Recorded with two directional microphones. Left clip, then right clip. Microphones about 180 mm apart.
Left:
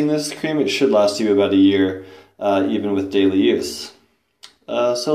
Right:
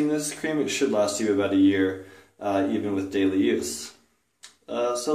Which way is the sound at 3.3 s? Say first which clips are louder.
Left 7 dB; 30° left (ahead or behind).